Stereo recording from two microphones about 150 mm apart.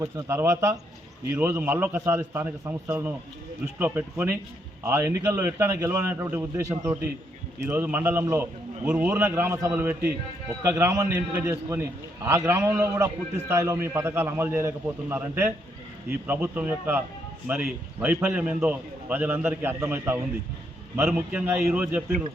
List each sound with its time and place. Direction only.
0.0 s a man's voice: 20° right (ahead or behind)